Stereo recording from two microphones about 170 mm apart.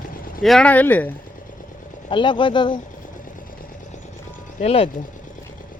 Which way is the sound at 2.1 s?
30° left (ahead or behind).